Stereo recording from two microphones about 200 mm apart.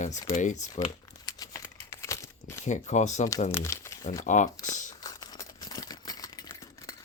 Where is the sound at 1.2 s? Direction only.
15° left (ahead or behind).